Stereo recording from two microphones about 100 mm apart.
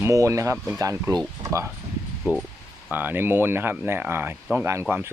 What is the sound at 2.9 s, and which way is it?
Speech, 20° right (ahead or behind).